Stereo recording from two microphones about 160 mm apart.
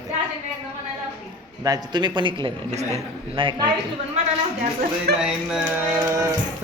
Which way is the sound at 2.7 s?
45° right (ahead or behind).